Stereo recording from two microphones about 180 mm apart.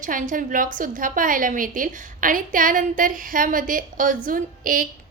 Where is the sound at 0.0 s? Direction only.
45° right (ahead or behind).